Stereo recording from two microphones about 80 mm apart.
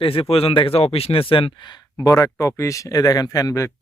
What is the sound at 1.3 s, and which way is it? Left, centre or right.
Speech, left.